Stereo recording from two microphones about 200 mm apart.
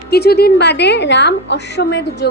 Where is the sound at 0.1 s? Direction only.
55° left (ahead or behind).